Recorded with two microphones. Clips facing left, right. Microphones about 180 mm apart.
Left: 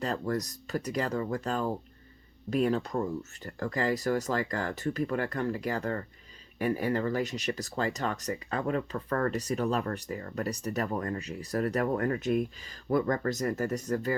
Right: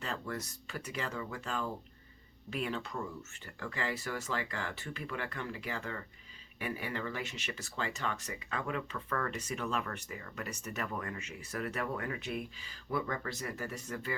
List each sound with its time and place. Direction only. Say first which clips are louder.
0.0 s speech: left 8 dB; 40° left (ahead or behind)